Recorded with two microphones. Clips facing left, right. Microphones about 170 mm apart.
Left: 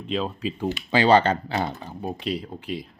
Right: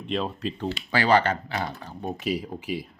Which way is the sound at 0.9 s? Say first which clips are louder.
Left 3 dB; 25° left (ahead or behind).